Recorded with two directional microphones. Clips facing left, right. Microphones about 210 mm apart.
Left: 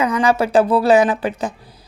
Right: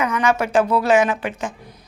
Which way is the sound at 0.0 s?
35° left (ahead or behind).